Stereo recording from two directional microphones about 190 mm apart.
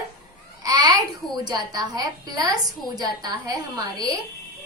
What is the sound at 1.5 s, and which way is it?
Speech, 20° right (ahead or behind).